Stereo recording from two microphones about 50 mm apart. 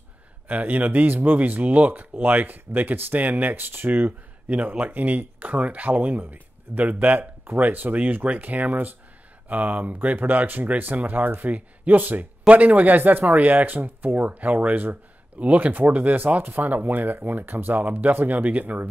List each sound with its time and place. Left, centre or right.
0.5 s speech: right